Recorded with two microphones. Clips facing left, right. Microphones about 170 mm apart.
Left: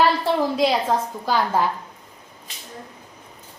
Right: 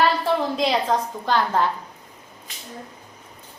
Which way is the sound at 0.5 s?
5° left (ahead or behind).